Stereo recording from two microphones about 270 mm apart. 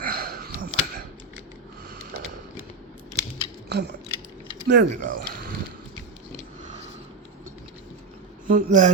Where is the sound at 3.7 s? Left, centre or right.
Right.